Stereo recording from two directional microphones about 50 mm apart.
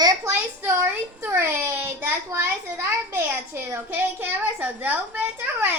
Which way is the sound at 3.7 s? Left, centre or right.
Right.